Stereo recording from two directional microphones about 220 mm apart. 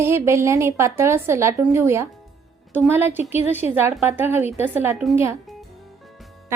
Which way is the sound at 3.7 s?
10° right (ahead or behind).